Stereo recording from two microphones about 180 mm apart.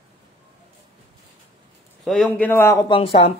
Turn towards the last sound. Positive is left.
turn(degrees=30)  # may be behind; listen again after turning